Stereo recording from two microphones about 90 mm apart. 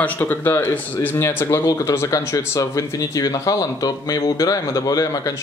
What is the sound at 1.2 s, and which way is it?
Speech, 30° left (ahead or behind).